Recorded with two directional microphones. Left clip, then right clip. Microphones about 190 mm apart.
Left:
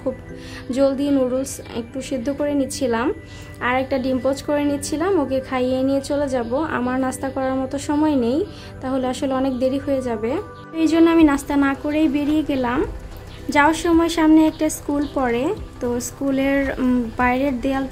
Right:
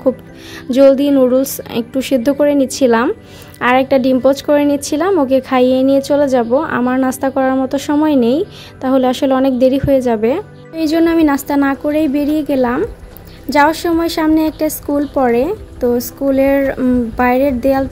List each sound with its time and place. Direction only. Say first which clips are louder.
0.7 s a woman's voice: right 10 dB; 35° right (ahead or behind)
10.8 s a woman's voice: right 2 dB; 20° right (ahead or behind)